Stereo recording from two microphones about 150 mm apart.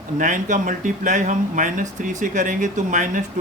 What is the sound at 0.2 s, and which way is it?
Speech, 60° right (ahead or behind).